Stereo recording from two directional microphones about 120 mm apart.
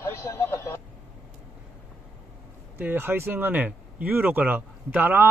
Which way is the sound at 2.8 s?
15° right (ahead or behind).